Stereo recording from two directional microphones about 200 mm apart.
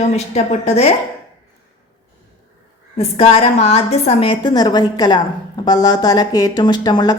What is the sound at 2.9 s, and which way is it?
A woman's voice, 30° left (ahead or behind).